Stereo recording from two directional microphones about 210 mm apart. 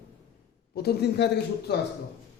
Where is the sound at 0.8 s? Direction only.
50° left (ahead or behind).